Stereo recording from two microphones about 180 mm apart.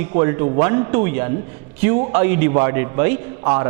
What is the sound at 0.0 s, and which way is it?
A man's voice, 15° right (ahead or behind).